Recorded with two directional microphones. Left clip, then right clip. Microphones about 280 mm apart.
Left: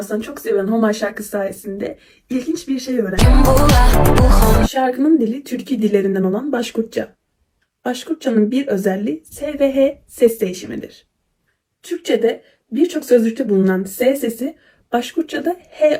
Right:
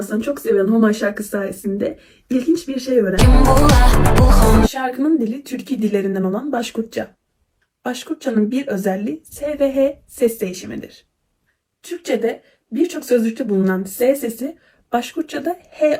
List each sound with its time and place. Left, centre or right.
0.2 s speech: centre